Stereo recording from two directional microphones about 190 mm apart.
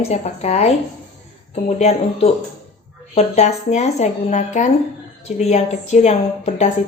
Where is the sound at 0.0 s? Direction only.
35° left (ahead or behind).